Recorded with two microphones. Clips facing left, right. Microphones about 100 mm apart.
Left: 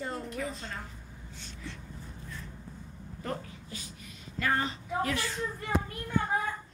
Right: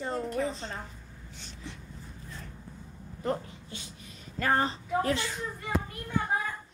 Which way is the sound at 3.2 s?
25° right (ahead or behind).